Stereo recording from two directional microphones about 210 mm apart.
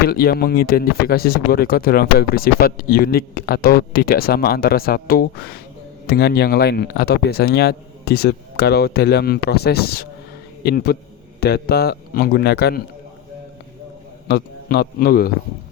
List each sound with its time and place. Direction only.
0.1 s speech: 45° left (ahead or behind)
14.3 s a man's voice: 50° left (ahead or behind)